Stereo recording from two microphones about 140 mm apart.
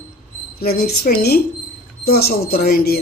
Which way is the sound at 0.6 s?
90° left.